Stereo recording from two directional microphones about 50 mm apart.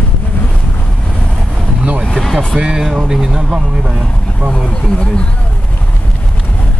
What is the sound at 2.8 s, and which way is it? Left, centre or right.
Speech, centre.